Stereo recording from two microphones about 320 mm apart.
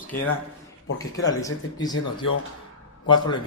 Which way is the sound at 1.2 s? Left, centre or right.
Centre.